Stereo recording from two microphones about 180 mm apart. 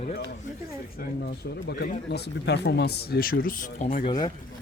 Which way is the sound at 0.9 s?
60° left (ahead or behind).